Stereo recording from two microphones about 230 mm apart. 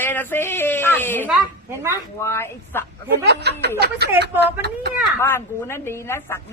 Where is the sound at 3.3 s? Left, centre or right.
Right.